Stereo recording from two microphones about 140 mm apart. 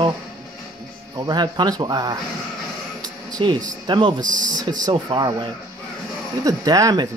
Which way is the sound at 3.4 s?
35° right (ahead or behind).